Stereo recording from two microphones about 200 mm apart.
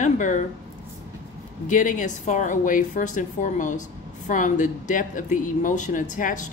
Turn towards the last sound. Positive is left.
turn(degrees=40)  # may be behind; listen again after turning